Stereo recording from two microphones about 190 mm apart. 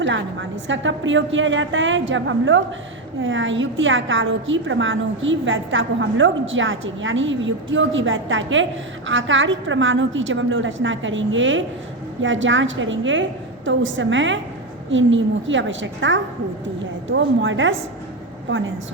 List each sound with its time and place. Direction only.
0.0 s a woman's voice: 75° right (ahead or behind)
3.2 s a woman's voice: 85° right